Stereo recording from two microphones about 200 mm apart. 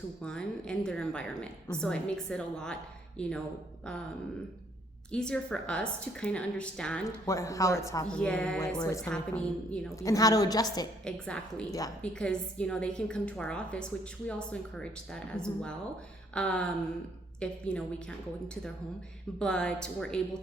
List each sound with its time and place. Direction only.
0.2 s a woman's voice: 5° left (ahead or behind)
5.1 s a woman's voice: 5° left (ahead or behind)
7.3 s a woman's voice: 15° left (ahead or behind)
9.0 s a woman's voice: 5° left (ahead or behind)
9.9 s a woman's voice: 15° left (ahead or behind)
11.0 s a woman's voice: 5° left (ahead or behind)
19.4 s a woman's voice: 5° left (ahead or behind)